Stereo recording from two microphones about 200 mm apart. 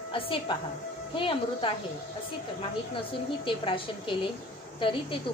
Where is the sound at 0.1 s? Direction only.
25° left (ahead or behind).